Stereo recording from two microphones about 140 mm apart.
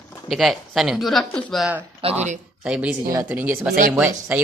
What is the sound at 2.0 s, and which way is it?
Speech, 45° right (ahead or behind).